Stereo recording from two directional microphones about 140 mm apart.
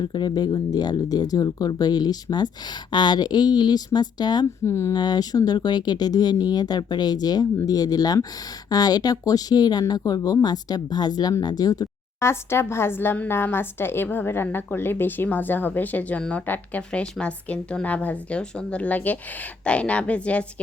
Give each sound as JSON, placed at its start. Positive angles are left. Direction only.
{"t": 0.0, "sound": "speech", "side_deg": 30}
{"t": 4.6, "sound": "speech", "side_deg": 20}